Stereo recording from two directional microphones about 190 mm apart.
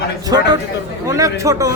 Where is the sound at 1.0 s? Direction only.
15° right (ahead or behind).